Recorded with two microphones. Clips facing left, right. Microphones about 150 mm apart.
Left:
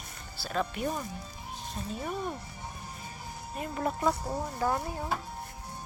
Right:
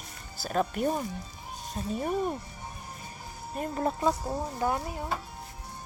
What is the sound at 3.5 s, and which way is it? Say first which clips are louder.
Speech: right 3 dB; 40° right (ahead or behind).